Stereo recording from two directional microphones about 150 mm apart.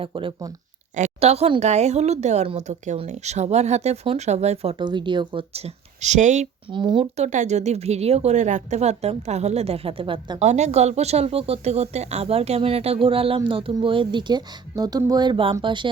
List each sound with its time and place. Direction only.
0.0 s speech: 35° right (ahead or behind)
0.9 s a woman's voice: 50° right (ahead or behind)
6.7 s a woman's voice: 30° right (ahead or behind)
10.4 s speech: 50° right (ahead or behind); by 15.9 s 30° right (ahead or behind)